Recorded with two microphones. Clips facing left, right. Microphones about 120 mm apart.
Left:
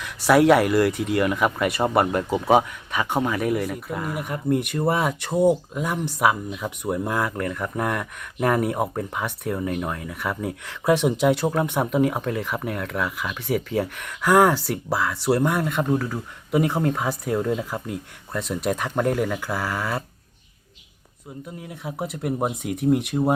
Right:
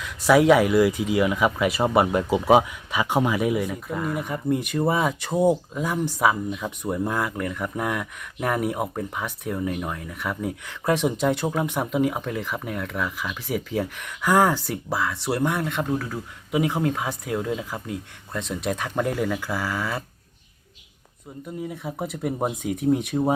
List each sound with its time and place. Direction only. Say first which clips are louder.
0.3 s speech: even; centre (ahead or behind)
21.6 s speech: right 1 dB; 5° left (ahead or behind)